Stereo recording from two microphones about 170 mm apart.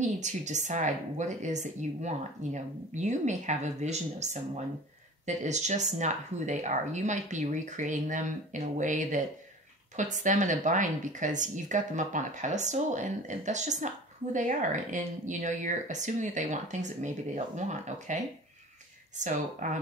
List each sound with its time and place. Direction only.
0.0 s speech: 45° right (ahead or behind)